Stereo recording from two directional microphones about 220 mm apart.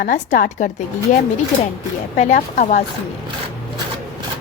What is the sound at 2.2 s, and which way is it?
Speech, 35° left (ahead or behind).